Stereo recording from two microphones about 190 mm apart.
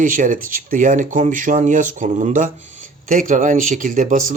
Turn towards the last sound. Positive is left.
turn(degrees=-45)  # may be behind; listen again after turning